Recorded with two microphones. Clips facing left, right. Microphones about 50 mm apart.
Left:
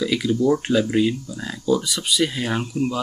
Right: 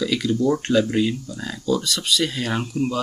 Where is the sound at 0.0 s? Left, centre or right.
Centre.